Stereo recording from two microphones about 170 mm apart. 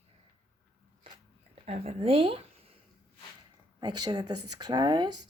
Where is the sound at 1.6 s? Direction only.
35° right (ahead or behind).